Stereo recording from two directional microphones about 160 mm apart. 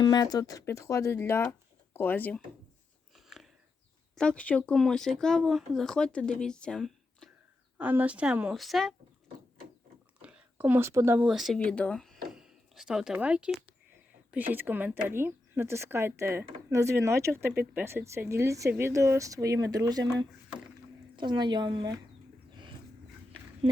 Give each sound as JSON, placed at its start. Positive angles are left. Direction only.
{"t": 0.0, "sound": "speech", "side_deg": 25}
{"t": 3.2, "sound": "a sound", "side_deg": 0}
{"t": 4.1, "sound": "speech", "side_deg": 5}
{"t": 7.8, "sound": "speech", "side_deg": -10}
{"t": 10.2, "sound": "a sound", "side_deg": -5}
{"t": 11.3, "sound": "speech", "side_deg": 0}